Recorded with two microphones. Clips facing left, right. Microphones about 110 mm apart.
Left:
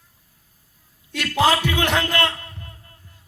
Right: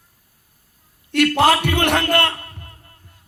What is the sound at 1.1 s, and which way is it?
A man's voice, 60° right (ahead or behind).